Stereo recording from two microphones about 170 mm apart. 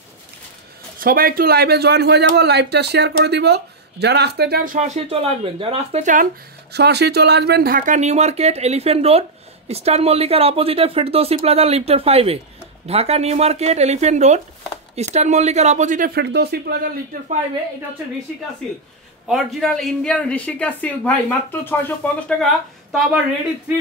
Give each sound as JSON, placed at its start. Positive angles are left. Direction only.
{"t": 0.9, "sound": "a man's voice", "side_deg": -60}
{"t": 4.7, "sound": "speech", "side_deg": -40}
{"t": 6.7, "sound": "speech", "side_deg": -75}
{"t": 16.2, "sound": "a man's voice", "side_deg": -75}
{"t": 19.2, "sound": "a woman's voice", "side_deg": 0}
{"t": 22.4, "sound": "speech", "side_deg": 0}